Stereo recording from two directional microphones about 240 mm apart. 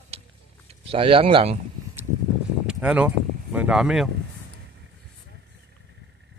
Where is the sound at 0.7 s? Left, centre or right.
Right.